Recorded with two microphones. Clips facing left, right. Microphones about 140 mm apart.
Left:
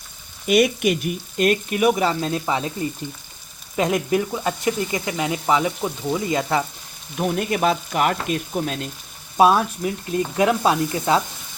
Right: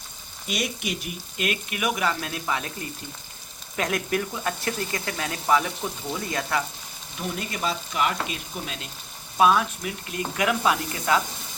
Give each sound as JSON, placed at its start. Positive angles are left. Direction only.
{"t": 0.4, "sound": "speech", "side_deg": 60}
{"t": 3.8, "sound": "speech", "side_deg": 20}
{"t": 7.2, "sound": "frying", "side_deg": 60}
{"t": 9.4, "sound": "speech", "side_deg": 35}